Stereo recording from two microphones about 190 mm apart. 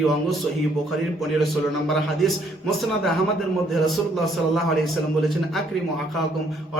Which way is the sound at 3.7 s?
Centre (ahead or behind).